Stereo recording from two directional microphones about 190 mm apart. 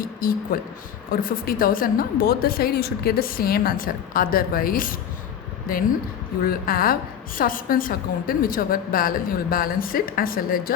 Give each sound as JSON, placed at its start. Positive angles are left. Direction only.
{"t": 0.0, "sound": "a woman's voice", "side_deg": 50}
{"t": 6.4, "sound": "a woman's voice", "side_deg": 50}